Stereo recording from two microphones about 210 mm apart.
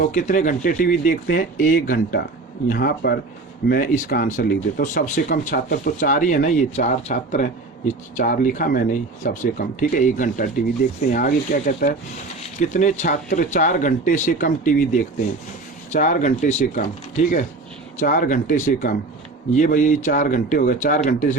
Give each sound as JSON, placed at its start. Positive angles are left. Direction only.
{"t": 0.0, "sound": "speech", "side_deg": 40}